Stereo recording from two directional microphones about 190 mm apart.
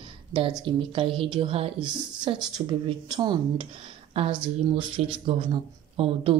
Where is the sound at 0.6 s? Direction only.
25° right (ahead or behind).